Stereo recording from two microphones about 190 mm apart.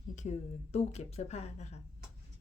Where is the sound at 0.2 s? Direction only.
35° left (ahead or behind).